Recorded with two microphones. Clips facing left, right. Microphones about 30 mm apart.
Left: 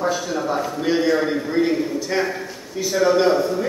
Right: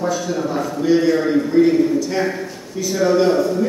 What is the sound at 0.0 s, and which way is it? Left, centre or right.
A man's voice, centre.